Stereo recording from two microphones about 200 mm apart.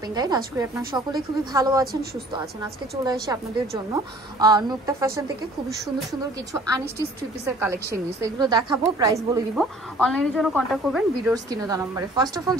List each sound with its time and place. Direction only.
0.1 s a woman's voice: 20° right (ahead or behind)
7.9 s a woman's voice: 20° right (ahead or behind)
9.6 s a woman's voice: centre (ahead or behind)
11.3 s a woman's voice: 20° right (ahead or behind)